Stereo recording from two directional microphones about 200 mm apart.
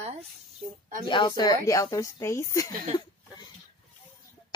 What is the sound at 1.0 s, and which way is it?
A woman's voice, 20° left (ahead or behind).